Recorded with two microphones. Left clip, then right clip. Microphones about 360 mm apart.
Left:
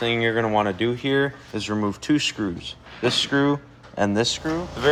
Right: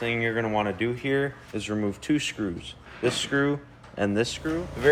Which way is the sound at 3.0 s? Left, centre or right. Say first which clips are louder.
Left 4 dB; centre.